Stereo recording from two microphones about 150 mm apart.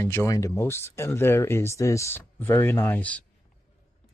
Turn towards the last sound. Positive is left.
turn(degrees=10)  # may be behind; listen again after turning